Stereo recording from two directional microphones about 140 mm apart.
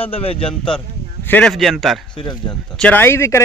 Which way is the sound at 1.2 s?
15° left (ahead or behind).